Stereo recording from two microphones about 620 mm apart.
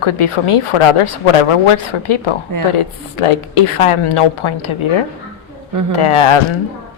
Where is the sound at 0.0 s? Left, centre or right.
Left.